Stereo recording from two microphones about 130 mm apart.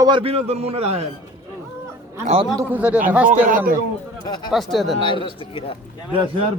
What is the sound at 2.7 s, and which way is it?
Speech, 10° right (ahead or behind).